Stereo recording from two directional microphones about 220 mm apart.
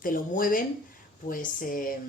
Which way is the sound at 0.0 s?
40° left (ahead or behind).